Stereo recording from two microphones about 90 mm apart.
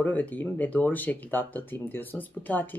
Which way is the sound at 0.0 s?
20° left (ahead or behind).